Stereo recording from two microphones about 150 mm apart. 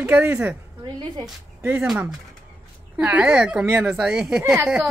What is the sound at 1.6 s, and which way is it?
Speech, 10° right (ahead or behind).